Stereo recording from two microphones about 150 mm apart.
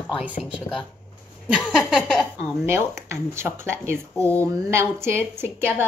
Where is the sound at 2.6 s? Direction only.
15° right (ahead or behind).